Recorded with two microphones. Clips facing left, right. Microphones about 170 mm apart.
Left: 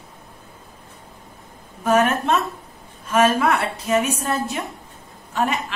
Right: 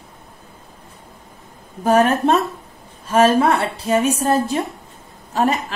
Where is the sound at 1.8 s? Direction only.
35° right (ahead or behind).